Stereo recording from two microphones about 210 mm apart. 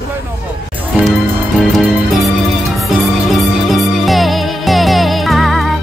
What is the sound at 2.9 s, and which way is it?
Music, centre (ahead or behind).